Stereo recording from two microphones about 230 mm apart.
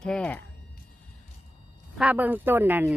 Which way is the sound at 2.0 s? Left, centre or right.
Centre.